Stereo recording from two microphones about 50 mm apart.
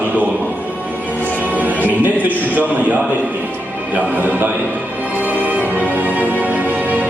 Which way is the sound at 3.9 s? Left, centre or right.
Right.